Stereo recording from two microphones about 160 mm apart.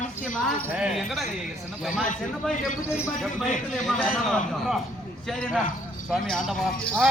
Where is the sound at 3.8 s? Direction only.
Centre (ahead or behind).